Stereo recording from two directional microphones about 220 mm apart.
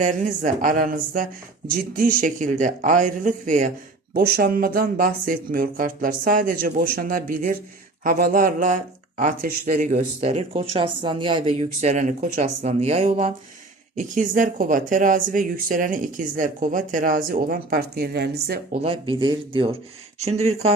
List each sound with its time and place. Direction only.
0.0 s speech: 35° right (ahead or behind)
18.8 s speech: 25° right (ahead or behind)